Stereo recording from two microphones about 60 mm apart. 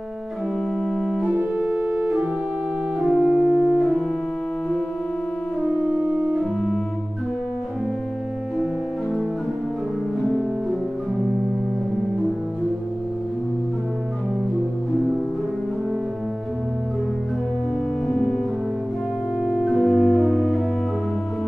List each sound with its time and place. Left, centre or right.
0.9 s organ: centre
1.6 s organ: centre
3.1 s music: centre
10.2 s music: centre
18.0 s music: centre
19.4 s organ: centre